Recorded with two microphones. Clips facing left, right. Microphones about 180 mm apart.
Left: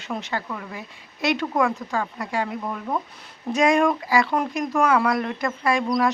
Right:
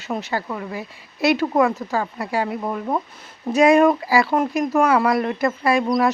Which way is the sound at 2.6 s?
25° right (ahead or behind).